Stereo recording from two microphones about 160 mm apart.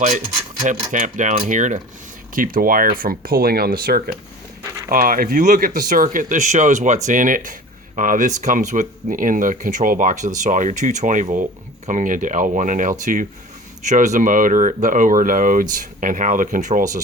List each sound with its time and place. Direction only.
0.6 s speech: 50° right (ahead or behind)